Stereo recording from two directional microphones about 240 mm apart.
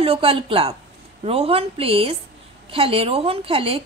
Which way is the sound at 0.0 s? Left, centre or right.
Right.